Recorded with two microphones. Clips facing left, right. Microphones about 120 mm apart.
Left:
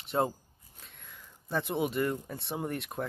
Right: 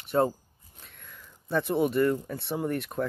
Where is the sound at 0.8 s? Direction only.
20° left (ahead or behind).